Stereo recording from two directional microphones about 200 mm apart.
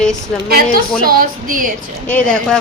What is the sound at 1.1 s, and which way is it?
Speech, 45° right (ahead or behind).